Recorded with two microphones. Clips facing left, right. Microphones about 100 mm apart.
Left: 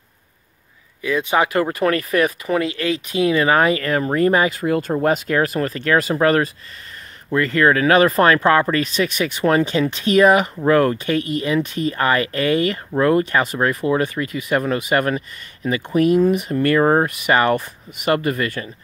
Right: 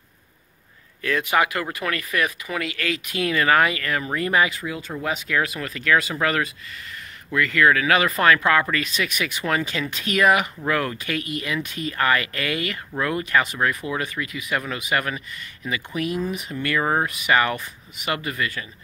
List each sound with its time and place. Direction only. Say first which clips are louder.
1.0 s speech: left 3 dB; 20° left (ahead or behind); by 18.7 s 40° left (ahead or behind)